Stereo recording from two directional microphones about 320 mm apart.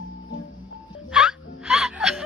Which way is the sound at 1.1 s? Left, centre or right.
Centre.